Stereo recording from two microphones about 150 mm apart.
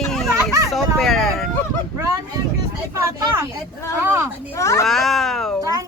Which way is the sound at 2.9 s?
20° right (ahead or behind).